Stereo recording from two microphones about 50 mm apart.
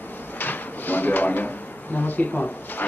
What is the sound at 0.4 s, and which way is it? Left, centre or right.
Drawer open or close, left.